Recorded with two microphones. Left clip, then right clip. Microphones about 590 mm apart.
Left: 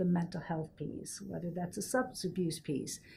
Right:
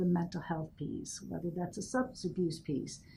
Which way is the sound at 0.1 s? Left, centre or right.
Centre.